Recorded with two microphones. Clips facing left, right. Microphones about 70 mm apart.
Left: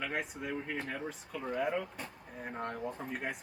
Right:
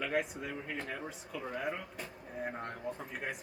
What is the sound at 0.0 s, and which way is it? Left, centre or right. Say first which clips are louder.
Speech: right 3 dB; centre.